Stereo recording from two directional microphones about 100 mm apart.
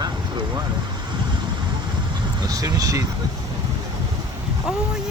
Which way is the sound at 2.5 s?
40° right (ahead or behind).